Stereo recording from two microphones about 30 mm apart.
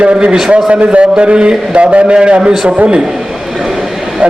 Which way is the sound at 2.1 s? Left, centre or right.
Right.